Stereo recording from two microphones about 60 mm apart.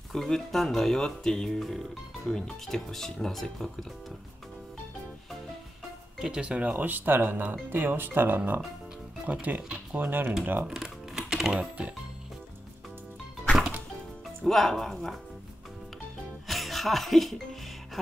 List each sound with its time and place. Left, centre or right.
0.1 s speech: centre
6.3 s speech: centre; by 8.4 s right
9.2 s speech: right
10.7 s typing: centre
14.4 s speech: centre
16.4 s music: centre